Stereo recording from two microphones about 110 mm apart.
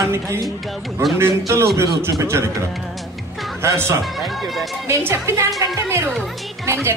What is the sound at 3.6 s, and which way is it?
Speech, 25° right (ahead or behind).